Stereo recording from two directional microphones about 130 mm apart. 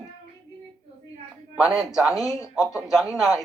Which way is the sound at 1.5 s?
5° right (ahead or behind).